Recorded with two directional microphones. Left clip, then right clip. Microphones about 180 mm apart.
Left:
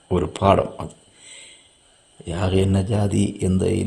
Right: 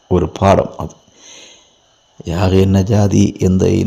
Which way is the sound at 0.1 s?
35° right (ahead or behind).